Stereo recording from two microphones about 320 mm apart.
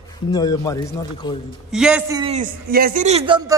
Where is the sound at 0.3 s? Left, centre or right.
Centre.